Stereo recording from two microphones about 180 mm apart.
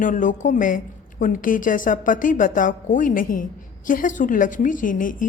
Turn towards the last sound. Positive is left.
turn(degrees=50)  # may be behind; listen again after turning